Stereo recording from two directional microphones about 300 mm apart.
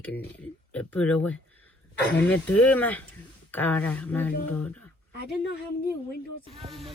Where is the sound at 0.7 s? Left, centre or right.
Centre.